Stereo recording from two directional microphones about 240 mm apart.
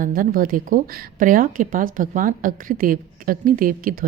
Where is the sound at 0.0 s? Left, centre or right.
Right.